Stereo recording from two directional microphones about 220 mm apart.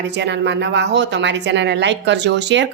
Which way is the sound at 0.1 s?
55° right (ahead or behind).